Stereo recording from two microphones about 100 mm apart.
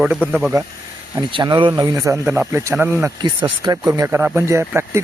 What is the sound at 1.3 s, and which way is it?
Speech, 50° right (ahead or behind).